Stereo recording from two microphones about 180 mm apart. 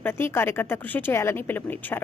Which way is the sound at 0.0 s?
10° left (ahead or behind).